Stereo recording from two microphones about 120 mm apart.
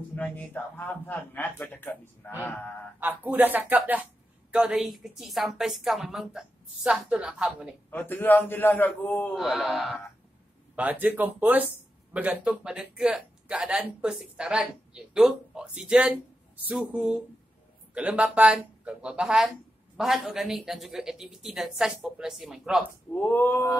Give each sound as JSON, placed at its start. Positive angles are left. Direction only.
{"t": 0.1, "sound": "a man's voice", "side_deg": 15}
{"t": 3.0, "sound": "speech", "side_deg": -15}
{"t": 7.9, "sound": "a man's voice", "side_deg": 15}
{"t": 9.4, "sound": "speech", "side_deg": 0}
{"t": 10.8, "sound": "speech", "side_deg": -15}
{"t": 23.1, "sound": "a man's voice", "side_deg": 20}